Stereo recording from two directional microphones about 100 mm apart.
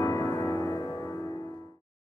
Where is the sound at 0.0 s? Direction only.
30° left (ahead or behind).